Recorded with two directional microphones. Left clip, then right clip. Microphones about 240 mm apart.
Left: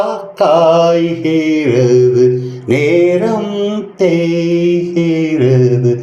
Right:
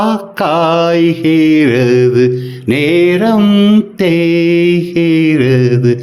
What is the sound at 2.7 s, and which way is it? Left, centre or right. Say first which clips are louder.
Music: even; right.